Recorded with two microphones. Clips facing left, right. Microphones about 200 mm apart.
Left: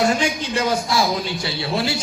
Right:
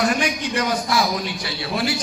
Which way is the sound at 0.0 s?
25° left (ahead or behind).